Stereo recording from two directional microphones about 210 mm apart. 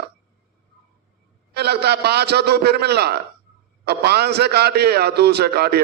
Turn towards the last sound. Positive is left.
turn(degrees=-50)  # may be behind; listen again after turning